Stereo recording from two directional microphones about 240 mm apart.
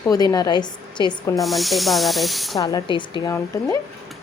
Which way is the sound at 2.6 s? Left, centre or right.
Centre.